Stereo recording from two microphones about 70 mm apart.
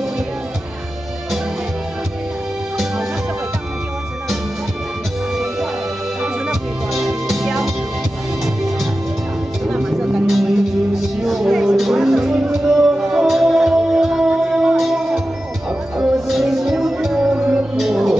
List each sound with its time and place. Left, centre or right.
6.9 s music: centre
9.7 s music: centre
17.7 s music: centre